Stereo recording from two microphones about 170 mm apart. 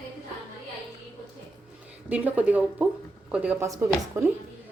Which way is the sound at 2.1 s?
10° right (ahead or behind).